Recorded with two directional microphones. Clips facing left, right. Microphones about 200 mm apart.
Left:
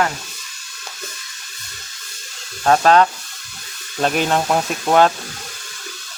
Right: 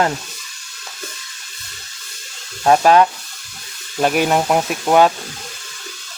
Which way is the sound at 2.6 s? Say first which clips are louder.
Right 1 dB; 15° right (ahead or behind).